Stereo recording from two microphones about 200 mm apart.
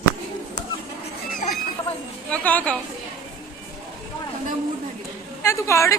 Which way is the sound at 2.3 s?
5° left (ahead or behind).